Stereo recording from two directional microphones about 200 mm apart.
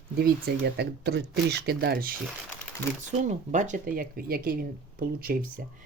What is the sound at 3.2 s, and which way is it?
Speech, 35° right (ahead or behind).